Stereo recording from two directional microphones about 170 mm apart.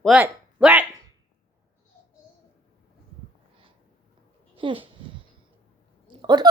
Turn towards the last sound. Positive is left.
turn(degrees=-25)  # may be behind; listen again after turning